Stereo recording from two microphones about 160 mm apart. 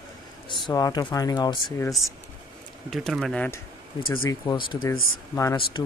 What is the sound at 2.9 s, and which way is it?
Speech, centre (ahead or behind).